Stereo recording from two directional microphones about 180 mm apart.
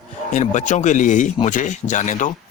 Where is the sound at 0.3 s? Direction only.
45° left (ahead or behind).